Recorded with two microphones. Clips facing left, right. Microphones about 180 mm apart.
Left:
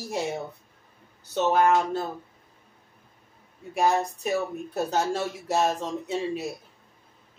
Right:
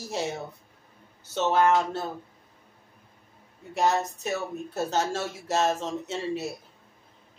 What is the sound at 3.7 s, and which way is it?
Speech, 10° left (ahead or behind).